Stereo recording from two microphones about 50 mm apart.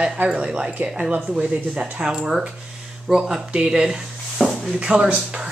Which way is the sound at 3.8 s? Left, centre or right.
Centre.